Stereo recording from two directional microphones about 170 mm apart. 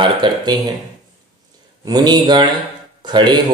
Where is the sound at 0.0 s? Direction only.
30° right (ahead or behind).